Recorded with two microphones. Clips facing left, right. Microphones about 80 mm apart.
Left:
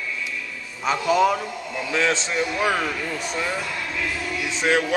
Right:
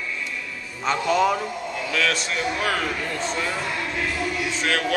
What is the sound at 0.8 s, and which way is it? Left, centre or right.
Speech, centre.